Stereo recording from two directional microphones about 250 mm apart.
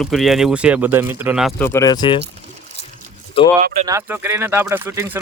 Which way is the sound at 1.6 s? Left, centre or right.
Centre.